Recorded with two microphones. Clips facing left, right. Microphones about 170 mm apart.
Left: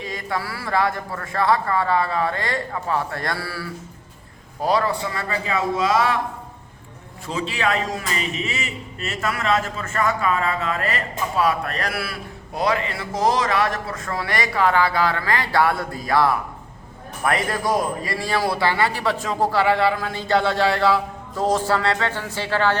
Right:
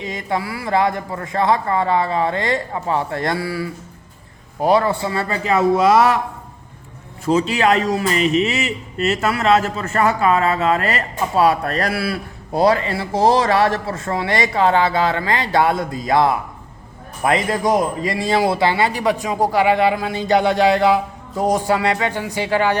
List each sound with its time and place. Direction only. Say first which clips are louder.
0.0 s a man's voice: right 4 dB; 20° right (ahead or behind)
7.3 s a man's voice: right 8 dB; 40° right (ahead or behind)
8.4 s a sound: right 7 dB; 70° right (ahead or behind)
9.0 s a man's voice: right 6 dB; 40° right (ahead or behind); by 22.8 s 15° right (ahead or behind)